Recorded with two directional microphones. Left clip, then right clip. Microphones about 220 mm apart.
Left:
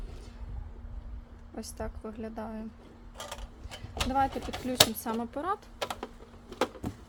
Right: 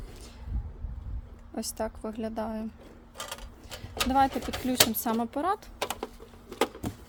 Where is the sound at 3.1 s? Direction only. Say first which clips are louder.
Right 2 dB; 25° right (ahead or behind).